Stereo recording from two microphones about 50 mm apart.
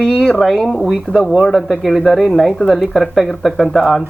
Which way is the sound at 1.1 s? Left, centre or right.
Centre.